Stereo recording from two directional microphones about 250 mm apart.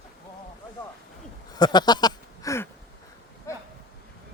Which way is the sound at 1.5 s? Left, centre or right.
Centre.